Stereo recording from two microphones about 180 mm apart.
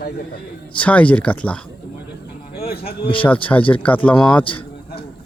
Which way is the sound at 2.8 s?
30° left (ahead or behind).